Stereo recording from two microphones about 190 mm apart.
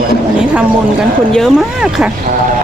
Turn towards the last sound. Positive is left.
turn(degrees=0)  # may be behind; listen again after turning